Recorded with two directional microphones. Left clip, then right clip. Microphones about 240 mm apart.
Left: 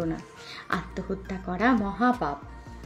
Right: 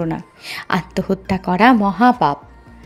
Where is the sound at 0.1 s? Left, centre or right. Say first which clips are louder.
Right 9 dB; right.